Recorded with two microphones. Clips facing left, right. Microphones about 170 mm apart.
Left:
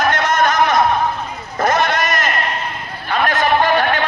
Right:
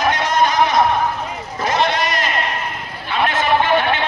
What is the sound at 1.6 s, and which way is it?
Sheep, 45° left (ahead or behind).